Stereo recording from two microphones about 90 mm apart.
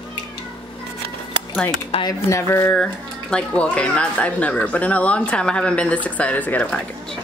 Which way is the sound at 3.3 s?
15° left (ahead or behind).